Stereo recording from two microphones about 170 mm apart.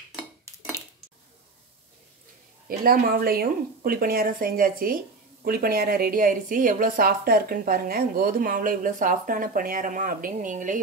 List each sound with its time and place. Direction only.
2.8 s speech: 60° right (ahead or behind)